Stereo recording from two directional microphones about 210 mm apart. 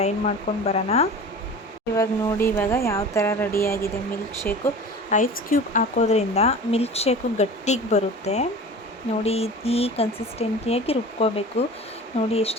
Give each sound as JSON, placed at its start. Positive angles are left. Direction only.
{"t": 0.0, "sound": "speech", "side_deg": 30}
{"t": 2.0, "sound": "speech", "side_deg": 15}
{"t": 5.1, "sound": "speech", "side_deg": 40}